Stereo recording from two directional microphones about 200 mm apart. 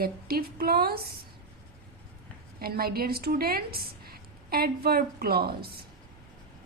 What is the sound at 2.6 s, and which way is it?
A woman's voice, 50° right (ahead or behind).